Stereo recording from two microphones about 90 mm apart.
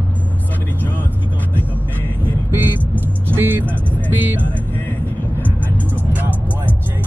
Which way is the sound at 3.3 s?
25° right (ahead or behind).